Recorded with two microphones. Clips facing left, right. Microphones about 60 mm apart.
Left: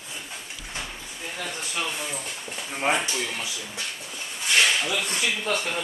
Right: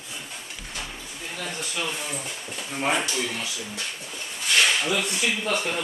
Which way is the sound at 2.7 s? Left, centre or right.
Centre.